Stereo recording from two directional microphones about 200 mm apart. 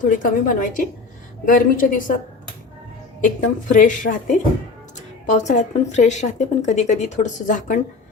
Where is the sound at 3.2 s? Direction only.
40° left (ahead or behind).